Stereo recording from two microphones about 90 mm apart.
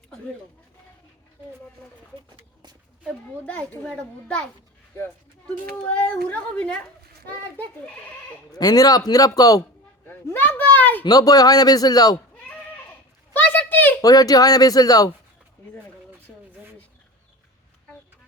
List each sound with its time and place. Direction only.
3.4 s a child's voice: 20° left (ahead or behind)
5.7 s speech: 15° left (ahead or behind)
8.5 s a man's voice: 45° left (ahead or behind)
10.1 s a sound: 25° left (ahead or behind)
11.0 s a man's voice: 45° left (ahead or behind)
13.3 s a sound: 20° left (ahead or behind)
14.0 s a man's voice: 45° left (ahead or behind)